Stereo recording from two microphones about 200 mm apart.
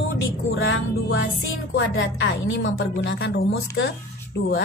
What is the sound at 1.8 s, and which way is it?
A woman's voice, 60° left (ahead or behind).